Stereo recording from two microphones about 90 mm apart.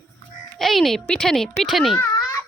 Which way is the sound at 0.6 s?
Centre (ahead or behind).